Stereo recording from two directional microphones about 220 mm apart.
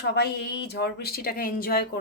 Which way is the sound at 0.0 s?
50° left (ahead or behind).